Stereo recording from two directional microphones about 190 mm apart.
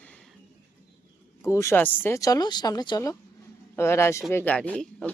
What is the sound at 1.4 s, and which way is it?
Speech, 15° left (ahead or behind).